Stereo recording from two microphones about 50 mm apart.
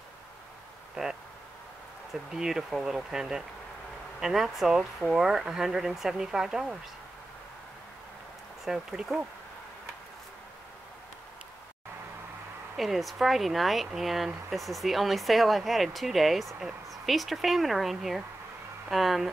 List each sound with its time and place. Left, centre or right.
1.0 s speech: centre
2.3 s speech: centre
8.6 s speech: centre
12.7 s speech: centre